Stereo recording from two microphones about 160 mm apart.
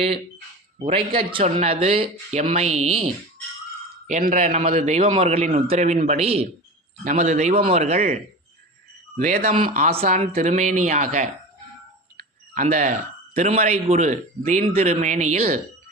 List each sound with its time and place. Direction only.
0.9 s speech: 35° right (ahead or behind)
1.5 s a man's voice: 45° right (ahead or behind)
4.0 s a man's voice: 50° right (ahead or behind)
9.6 s a man's voice: 50° right (ahead or behind)